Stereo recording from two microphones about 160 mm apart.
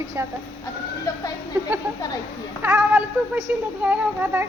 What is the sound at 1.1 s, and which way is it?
Speech, 20° left (ahead or behind).